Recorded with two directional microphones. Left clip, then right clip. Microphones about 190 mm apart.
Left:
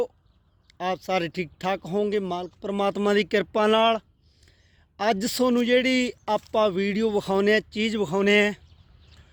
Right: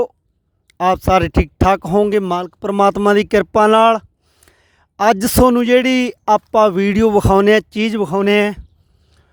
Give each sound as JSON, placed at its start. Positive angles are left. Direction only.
{"t": 0.8, "sound": "speech", "side_deg": -40}
{"t": 5.1, "sound": "a man's voice", "side_deg": -40}